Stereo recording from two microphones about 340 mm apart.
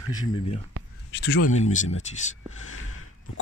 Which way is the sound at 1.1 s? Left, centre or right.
Left.